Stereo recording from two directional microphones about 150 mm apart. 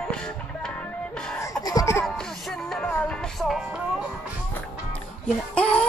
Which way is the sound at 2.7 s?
10° left (ahead or behind).